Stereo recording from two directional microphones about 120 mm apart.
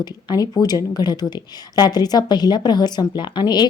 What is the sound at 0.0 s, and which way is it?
A woman's voice, 35° left (ahead or behind).